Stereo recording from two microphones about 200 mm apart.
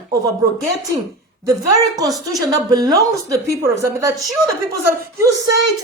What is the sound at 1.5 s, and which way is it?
A woman's voice, 15° right (ahead or behind).